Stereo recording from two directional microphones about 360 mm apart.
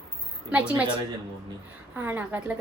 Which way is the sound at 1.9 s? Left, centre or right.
Centre.